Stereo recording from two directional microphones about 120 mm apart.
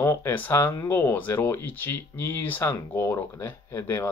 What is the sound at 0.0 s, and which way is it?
Speech, 20° left (ahead or behind).